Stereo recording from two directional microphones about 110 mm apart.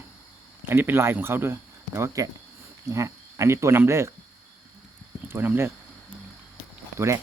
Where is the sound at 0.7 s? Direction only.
20° right (ahead or behind).